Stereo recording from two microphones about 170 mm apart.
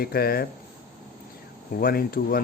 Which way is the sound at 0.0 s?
65° left (ahead or behind).